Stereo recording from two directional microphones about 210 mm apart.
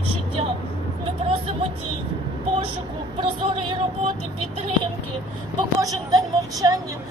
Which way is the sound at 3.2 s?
25° right (ahead or behind).